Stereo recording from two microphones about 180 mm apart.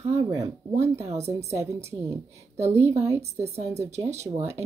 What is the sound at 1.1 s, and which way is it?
Speech, 35° right (ahead or behind).